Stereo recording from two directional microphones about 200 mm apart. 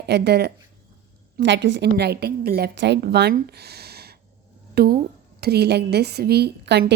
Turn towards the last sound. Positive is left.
turn(degrees=-55)  # may be behind; listen again after turning